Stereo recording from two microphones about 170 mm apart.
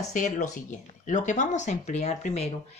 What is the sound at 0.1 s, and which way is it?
Speech, 50° left (ahead or behind).